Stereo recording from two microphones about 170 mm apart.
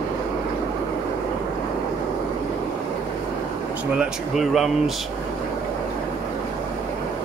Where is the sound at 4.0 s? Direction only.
Centre (ahead or behind).